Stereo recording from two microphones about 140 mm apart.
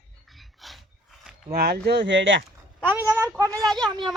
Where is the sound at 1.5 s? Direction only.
90° right.